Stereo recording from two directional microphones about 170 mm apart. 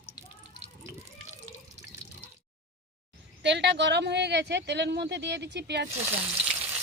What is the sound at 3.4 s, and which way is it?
Speech, 90° right.